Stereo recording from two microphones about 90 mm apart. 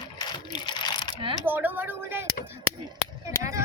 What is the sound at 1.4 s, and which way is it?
Speech, 20° right (ahead or behind).